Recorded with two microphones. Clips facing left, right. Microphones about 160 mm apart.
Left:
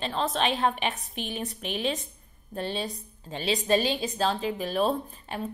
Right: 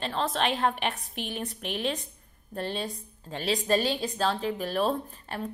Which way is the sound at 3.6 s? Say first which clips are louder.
Left 2 dB; 20° left (ahead or behind).